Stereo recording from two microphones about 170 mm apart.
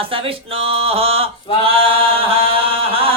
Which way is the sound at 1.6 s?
35° right (ahead or behind).